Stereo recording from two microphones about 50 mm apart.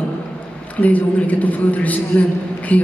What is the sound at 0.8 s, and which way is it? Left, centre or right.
A woman's voice, left.